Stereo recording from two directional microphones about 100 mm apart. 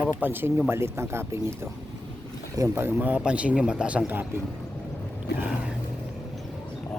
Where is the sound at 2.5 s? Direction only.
35° right (ahead or behind).